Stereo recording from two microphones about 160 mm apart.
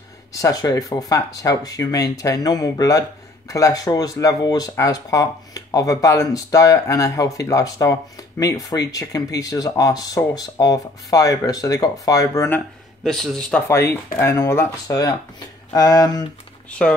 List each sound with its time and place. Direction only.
0.3 s speech: 20° left (ahead or behind)
13.0 s speech: centre (ahead or behind)
13.7 s speech: 15° left (ahead or behind)